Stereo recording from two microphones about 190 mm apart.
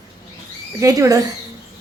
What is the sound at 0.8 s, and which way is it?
Speech, 15° right (ahead or behind).